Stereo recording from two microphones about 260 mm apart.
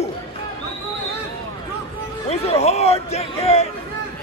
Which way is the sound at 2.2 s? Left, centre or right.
Left.